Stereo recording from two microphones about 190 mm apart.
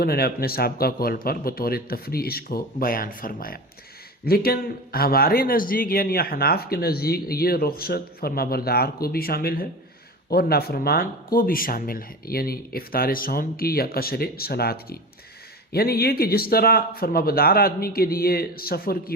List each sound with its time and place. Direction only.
0.0 s speech: 55° left (ahead or behind)